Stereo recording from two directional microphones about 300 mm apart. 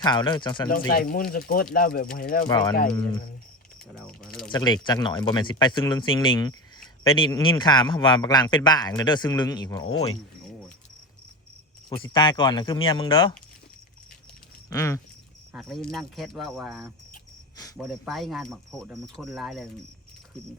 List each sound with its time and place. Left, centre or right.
0.0 s speech: centre
0.7 s speech: left
2.5 s speech: centre
3.9 s speech: centre
4.5 s speech: centre
12.0 s speech: centre
14.7 s speech: centre